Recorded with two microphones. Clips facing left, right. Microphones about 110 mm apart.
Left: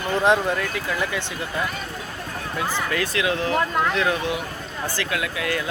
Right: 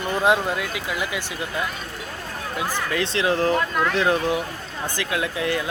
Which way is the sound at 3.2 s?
35° right (ahead or behind).